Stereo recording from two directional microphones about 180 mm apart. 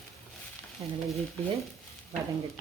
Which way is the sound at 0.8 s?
30° right (ahead or behind).